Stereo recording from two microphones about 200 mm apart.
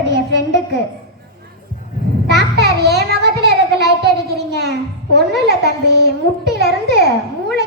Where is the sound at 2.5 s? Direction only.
55° right (ahead or behind).